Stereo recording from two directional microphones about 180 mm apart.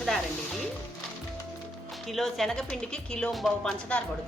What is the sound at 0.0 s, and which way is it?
Music, centre (ahead or behind).